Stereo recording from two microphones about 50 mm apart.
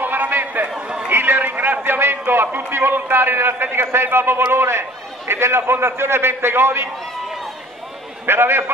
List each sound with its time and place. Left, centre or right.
0.0 s a sound: right
1.1 s a man's voice: right
8.3 s a man's voice: right